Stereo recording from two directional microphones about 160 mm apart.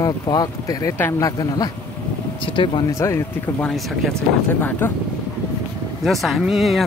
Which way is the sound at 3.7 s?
Centre (ahead or behind).